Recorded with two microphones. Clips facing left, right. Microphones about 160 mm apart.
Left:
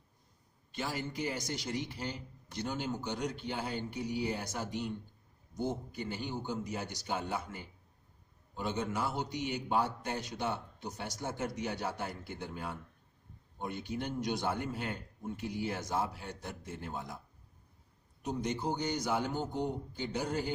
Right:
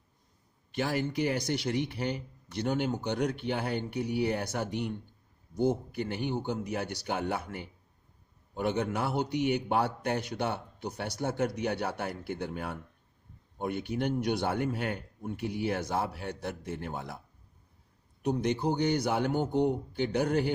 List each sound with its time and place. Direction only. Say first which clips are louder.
0.7 s speech: right 7 dB; 65° right (ahead or behind)
18.2 s speech: right 6 dB; 65° right (ahead or behind)